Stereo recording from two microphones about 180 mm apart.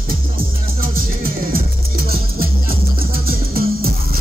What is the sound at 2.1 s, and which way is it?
Music, 55° right (ahead or behind).